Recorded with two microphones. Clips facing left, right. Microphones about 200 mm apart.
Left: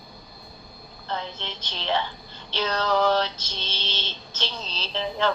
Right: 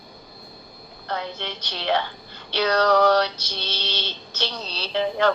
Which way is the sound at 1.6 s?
65° right (ahead or behind).